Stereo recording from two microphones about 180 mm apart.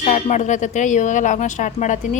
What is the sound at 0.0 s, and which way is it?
A woman's voice, 40° left (ahead or behind).